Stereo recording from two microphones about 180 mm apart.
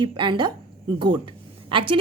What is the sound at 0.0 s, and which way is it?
A woman's voice, 25° right (ahead or behind).